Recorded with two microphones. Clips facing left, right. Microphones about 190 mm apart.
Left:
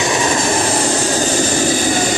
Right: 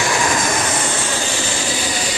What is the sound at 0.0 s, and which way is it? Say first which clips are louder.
Vehicle: left 3 dB; 20° left (ahead or behind).